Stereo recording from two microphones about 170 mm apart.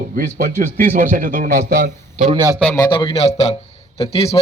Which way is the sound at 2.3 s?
25° right (ahead or behind).